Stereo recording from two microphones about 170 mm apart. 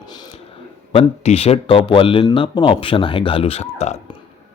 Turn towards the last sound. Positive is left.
turn(degrees=40)  # may be behind; listen again after turning